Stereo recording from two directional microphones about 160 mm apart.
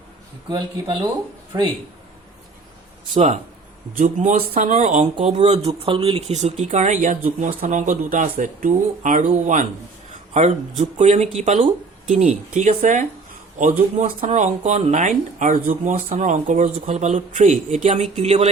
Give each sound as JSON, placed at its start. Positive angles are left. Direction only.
{"t": 0.4, "sound": "speech", "side_deg": -25}
{"t": 3.9, "sound": "speech", "side_deg": -50}